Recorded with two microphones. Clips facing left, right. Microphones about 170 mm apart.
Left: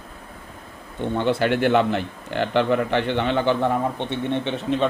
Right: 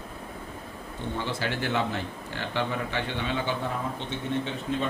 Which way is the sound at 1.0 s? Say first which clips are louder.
Left 10 dB; 60° left (ahead or behind).